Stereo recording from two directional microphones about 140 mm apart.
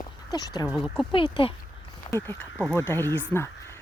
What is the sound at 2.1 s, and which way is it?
Speech, 15° left (ahead or behind).